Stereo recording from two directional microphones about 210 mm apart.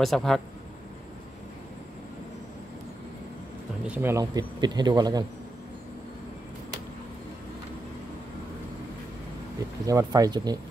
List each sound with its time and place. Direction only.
0.0 s speech: centre (ahead or behind)
3.8 s speech: 10° right (ahead or behind)
9.8 s speech: 15° right (ahead or behind)